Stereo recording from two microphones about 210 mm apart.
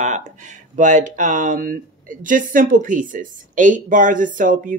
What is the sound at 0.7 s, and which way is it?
Speech, 35° right (ahead or behind).